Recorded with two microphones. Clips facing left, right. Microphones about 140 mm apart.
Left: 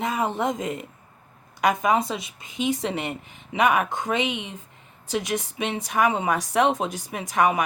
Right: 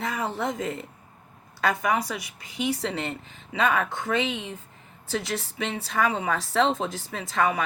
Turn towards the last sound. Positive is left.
turn(degrees=15)  # may be behind; listen again after turning